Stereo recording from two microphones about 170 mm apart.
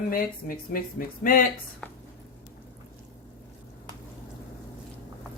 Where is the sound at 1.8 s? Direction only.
10° left (ahead or behind).